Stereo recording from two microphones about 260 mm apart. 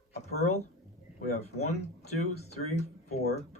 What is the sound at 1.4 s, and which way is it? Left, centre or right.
Speech, left.